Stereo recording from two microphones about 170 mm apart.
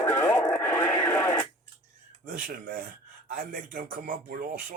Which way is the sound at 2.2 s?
55° right (ahead or behind).